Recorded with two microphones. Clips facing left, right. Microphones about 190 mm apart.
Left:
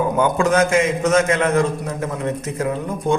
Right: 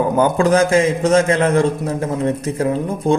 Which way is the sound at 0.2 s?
35° right (ahead or behind).